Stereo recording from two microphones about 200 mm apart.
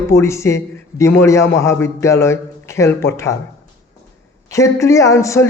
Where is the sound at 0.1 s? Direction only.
15° left (ahead or behind).